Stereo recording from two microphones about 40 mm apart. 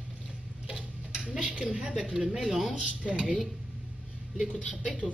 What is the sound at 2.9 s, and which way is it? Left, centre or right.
Speech, right.